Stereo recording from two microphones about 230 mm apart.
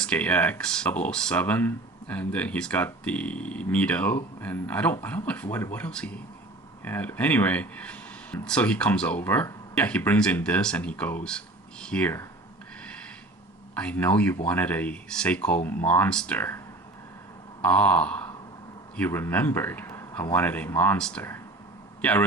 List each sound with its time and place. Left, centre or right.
0.0 s speech: centre
13.7 s speech: centre
17.6 s a sound: centre
18.9 s speech: centre